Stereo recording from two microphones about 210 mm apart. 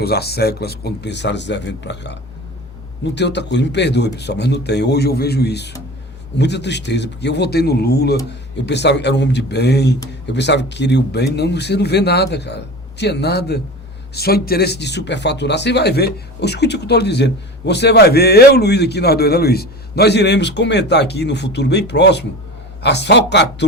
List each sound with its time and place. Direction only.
0.0 s speech: 50° left (ahead or behind)